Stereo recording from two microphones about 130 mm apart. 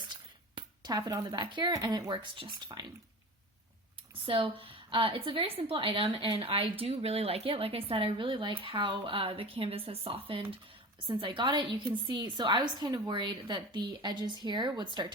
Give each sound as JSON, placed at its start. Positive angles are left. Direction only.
{"t": 0.1, "sound": "a woman's voice", "side_deg": -35}
{"t": 4.3, "sound": "a woman's voice", "side_deg": -45}